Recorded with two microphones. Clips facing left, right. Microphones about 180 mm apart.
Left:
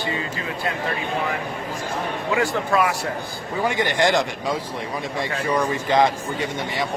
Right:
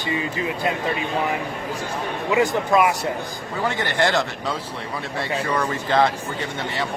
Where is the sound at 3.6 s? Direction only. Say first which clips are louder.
Left 1 dB; 15° left (ahead or behind).